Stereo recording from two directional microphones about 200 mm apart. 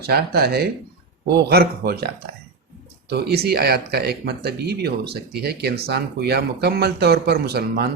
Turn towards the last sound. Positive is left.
turn(degrees=-50)  # may be behind; listen again after turning